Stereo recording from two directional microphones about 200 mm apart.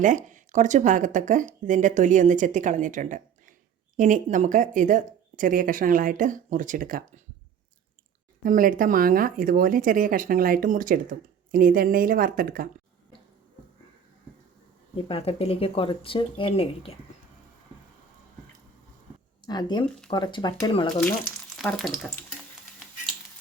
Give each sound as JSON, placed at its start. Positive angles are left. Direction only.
{"t": 0.0, "sound": "speech", "side_deg": -40}
{"t": 8.4, "sound": "speech", "side_deg": -45}
{"t": 14.9, "sound": "speech", "side_deg": 30}
{"t": 19.5, "sound": "speech", "side_deg": 20}
{"t": 21.5, "sound": "frying", "side_deg": 0}